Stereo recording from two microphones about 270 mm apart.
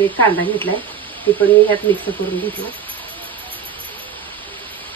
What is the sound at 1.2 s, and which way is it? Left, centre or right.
Speech, centre.